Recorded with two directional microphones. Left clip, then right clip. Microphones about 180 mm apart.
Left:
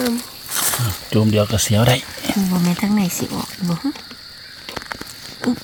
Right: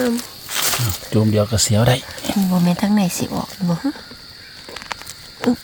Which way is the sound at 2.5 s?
20° right (ahead or behind).